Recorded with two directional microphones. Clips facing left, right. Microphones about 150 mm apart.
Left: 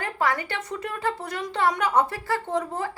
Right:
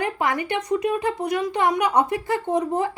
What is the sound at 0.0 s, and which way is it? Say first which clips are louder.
Speech: right 2 dB; 20° right (ahead or behind).